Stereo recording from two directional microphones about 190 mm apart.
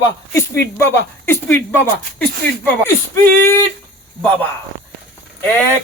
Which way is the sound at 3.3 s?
50° right (ahead or behind).